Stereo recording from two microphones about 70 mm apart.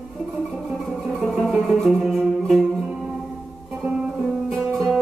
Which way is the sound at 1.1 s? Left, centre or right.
Centre.